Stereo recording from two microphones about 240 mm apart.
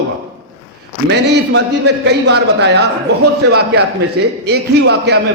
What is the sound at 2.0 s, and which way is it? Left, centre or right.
Speech, right.